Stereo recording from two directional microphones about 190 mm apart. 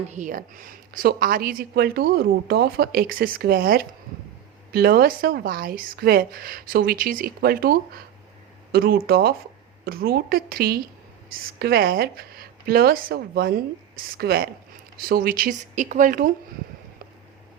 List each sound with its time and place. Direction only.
0.1 s a woman's voice: 45° right (ahead or behind)